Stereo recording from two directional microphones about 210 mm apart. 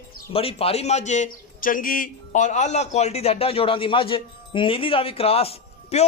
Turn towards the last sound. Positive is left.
turn(degrees=30)  # may be behind; listen again after turning